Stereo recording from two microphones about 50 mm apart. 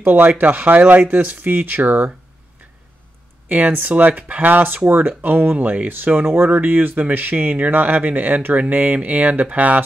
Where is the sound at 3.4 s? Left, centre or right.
Right.